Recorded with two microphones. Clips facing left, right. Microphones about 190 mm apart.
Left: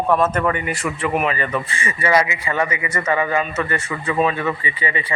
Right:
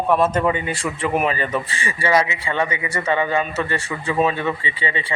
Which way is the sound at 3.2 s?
25° right (ahead or behind).